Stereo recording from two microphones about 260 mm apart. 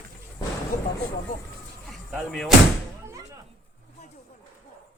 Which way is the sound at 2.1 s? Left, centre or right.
Centre.